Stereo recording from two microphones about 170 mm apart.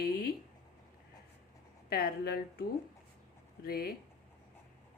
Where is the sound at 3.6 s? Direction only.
65° left (ahead or behind).